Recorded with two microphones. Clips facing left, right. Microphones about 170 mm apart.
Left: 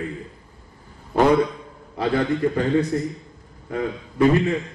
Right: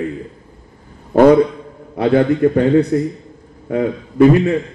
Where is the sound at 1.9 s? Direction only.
60° right (ahead or behind).